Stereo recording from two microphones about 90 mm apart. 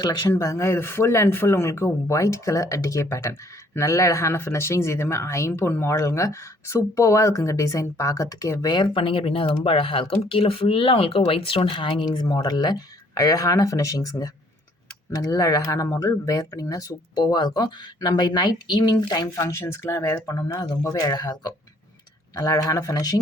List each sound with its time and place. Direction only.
0.3 s speech: 35° left (ahead or behind)
8.7 s speech: 65° left (ahead or behind)
12.0 s speech: 50° left (ahead or behind)
19.4 s speech: 30° left (ahead or behind)